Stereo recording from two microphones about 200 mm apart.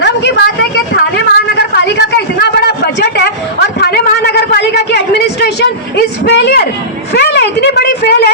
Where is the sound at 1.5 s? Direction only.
55° left (ahead or behind).